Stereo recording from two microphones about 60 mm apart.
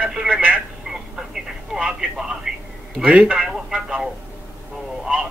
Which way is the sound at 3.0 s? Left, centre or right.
Right.